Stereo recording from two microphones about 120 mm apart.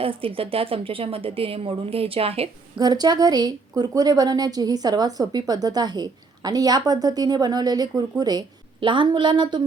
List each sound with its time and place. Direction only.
0.0 s a woman's voice: 50° right (ahead or behind)
2.7 s a woman's voice: 35° right (ahead or behind)